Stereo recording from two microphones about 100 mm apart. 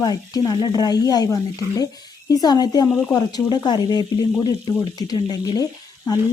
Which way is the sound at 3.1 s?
40° left (ahead or behind).